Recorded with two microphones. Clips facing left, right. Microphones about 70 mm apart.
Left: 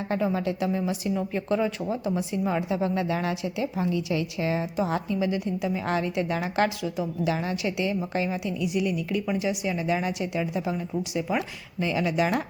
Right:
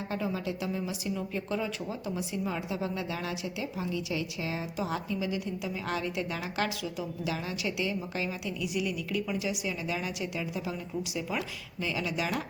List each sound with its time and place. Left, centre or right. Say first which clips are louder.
0.1 s a woman's voice: left 8 dB; left